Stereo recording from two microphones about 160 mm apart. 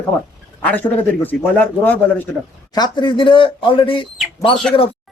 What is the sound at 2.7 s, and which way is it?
Speech, 25° left (ahead or behind).